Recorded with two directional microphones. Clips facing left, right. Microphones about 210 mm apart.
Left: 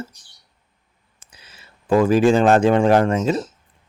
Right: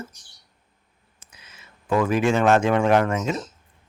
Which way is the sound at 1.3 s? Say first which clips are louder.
Left 2 dB; 30° left (ahead or behind).